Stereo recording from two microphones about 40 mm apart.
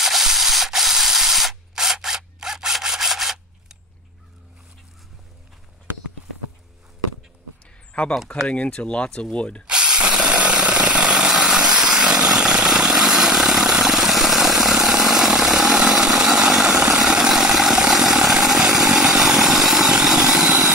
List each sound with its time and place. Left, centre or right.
0.0 s sanding: centre
1.8 s a sound: centre
8.5 s speech: left
9.7 s a sound: right
12.4 s vehicle: right
20.4 s vehicle: right